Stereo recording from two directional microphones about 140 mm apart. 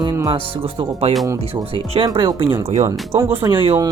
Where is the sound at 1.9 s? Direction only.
40° right (ahead or behind).